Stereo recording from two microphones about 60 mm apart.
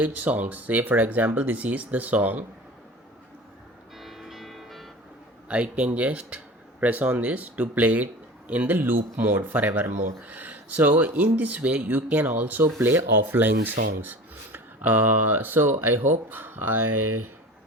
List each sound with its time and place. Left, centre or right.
0.0 s speech: right
3.9 s music: centre
5.5 s speech: right